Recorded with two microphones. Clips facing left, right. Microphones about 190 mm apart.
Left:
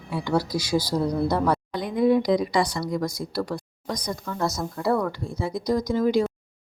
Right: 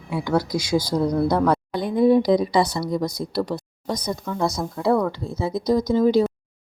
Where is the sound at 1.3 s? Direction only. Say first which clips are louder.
Right 3 dB; 5° left (ahead or behind).